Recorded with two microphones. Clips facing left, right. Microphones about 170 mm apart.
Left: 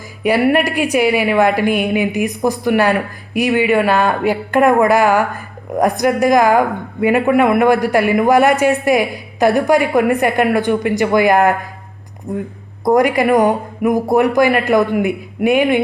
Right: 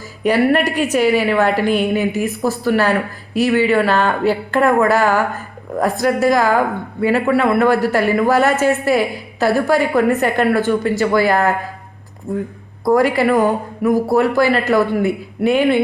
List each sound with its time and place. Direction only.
0.2 s a woman's voice: 10° left (ahead or behind)